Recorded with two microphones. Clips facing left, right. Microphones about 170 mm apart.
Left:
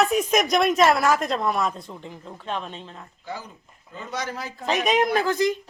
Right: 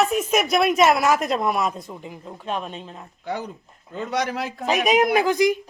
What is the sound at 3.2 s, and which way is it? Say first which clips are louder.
Speech: right 7 dB; 65° right (ahead or behind).